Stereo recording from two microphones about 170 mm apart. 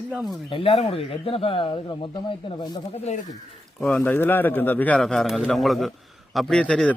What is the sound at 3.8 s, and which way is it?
A man's voice, 10° left (ahead or behind).